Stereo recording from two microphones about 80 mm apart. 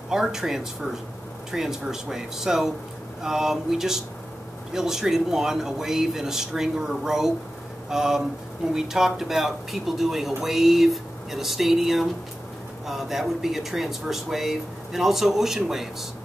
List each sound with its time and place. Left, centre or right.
0.1 s speech: centre